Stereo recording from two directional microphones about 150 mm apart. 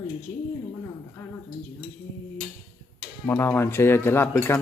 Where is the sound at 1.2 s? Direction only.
20° left (ahead or behind).